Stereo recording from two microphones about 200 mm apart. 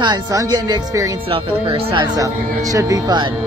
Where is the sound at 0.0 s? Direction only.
20° right (ahead or behind).